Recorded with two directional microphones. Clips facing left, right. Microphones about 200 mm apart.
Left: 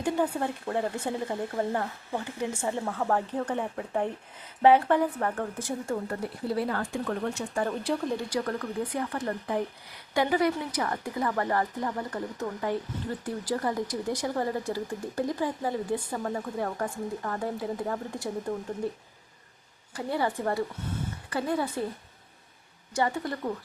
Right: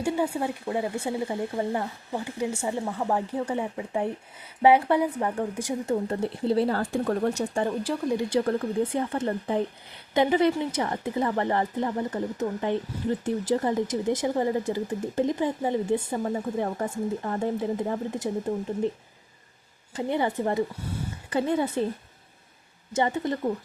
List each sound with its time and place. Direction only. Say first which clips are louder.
0.0 s speech: right 1 dB; 10° right (ahead or behind); by 7.4 s 40° right (ahead or behind)
7.7 s speech: right 2 dB; 10° right (ahead or behind)
8.3 s speech: right 6 dB; 25° right (ahead or behind)
19.9 s a woman's voice: right 3 dB; 20° right (ahead or behind)
22.9 s speech: right 3 dB; 20° right (ahead or behind)